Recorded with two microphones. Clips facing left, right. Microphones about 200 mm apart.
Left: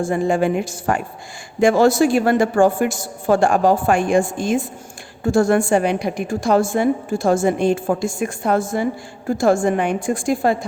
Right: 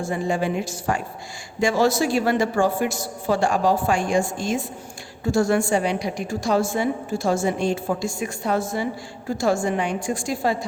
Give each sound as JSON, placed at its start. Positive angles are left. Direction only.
{"t": 0.0, "sound": "a woman's voice", "side_deg": 50}